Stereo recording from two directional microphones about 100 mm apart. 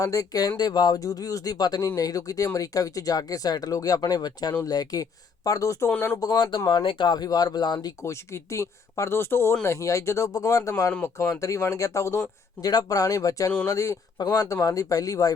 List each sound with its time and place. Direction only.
0.0 s speech: 35° left (ahead or behind)
8.0 s speech: 30° left (ahead or behind)